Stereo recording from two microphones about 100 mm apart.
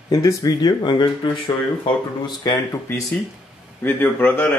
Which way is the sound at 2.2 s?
45° left (ahead or behind).